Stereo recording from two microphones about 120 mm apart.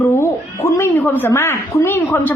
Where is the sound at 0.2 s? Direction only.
25° left (ahead or behind).